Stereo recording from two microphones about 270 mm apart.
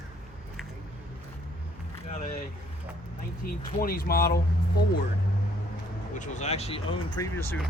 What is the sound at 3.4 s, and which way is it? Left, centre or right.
Speech, left.